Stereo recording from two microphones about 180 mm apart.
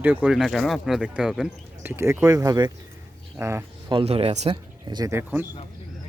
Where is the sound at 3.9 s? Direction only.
30° right (ahead or behind).